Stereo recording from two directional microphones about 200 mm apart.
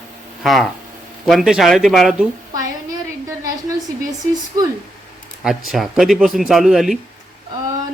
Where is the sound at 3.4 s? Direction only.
15° right (ahead or behind).